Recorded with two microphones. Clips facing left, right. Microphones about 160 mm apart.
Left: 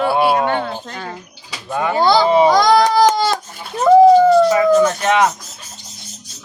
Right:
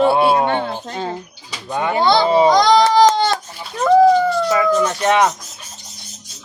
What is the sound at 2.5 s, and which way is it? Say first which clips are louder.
Speech: even; 5° left (ahead or behind).